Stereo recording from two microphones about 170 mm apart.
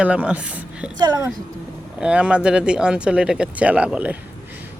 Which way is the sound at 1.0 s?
20° right (ahead or behind).